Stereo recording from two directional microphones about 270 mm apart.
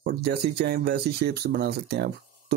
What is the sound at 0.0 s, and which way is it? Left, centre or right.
Speech, right.